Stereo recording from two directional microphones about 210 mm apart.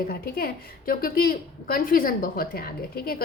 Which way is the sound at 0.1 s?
45° left (ahead or behind).